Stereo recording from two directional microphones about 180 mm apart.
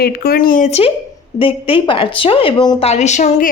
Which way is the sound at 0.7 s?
35° left (ahead or behind).